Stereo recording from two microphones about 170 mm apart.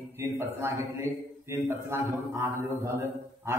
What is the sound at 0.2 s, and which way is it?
A man's voice, 15° right (ahead or behind).